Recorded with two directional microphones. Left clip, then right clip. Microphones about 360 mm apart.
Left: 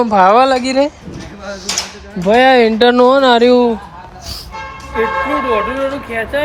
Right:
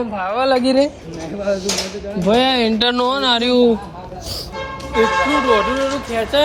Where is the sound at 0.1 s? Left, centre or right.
Centre.